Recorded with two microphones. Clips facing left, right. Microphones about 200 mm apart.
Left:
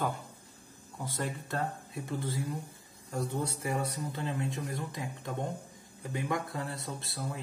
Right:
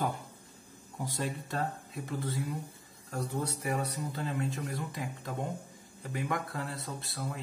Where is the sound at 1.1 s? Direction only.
15° right (ahead or behind).